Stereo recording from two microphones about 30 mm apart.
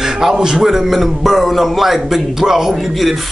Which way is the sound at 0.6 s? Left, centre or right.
Centre.